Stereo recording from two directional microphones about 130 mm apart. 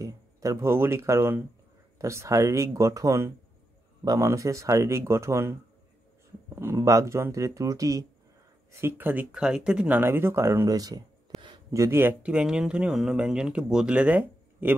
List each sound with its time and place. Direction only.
0.0 s speech: 25° right (ahead or behind)
8.8 s speech: 15° right (ahead or behind)